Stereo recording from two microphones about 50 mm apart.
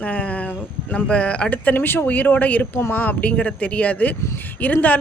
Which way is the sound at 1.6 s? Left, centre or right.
Left.